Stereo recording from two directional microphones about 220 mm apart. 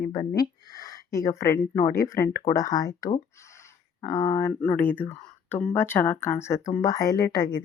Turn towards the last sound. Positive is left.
turn(degrees=20)  # may be behind; listen again after turning